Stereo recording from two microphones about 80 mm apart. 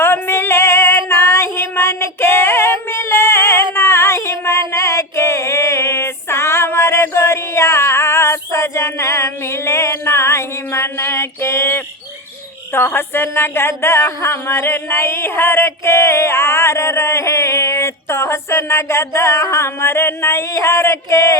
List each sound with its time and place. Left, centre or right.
0.0 s female singing: left
12.7 s a woman's voice: left